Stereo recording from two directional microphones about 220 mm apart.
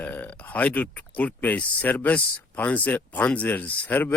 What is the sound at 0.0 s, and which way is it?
Speech, 5° left (ahead or behind).